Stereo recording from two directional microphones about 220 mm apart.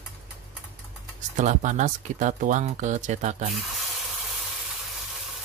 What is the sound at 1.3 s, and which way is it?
Speech, 35° right (ahead or behind).